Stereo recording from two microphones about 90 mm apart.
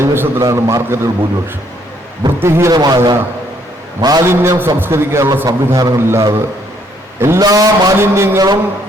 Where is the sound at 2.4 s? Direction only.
30° right (ahead or behind).